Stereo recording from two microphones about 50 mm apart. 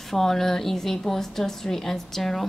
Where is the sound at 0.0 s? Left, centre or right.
Centre.